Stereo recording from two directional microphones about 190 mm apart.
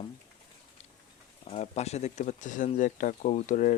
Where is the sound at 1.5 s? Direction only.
35° left (ahead or behind).